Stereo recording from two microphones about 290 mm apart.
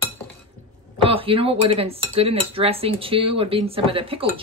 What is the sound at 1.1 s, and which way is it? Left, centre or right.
Speech, centre.